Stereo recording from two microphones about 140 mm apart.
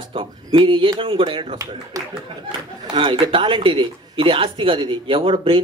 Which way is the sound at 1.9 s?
25° right (ahead or behind).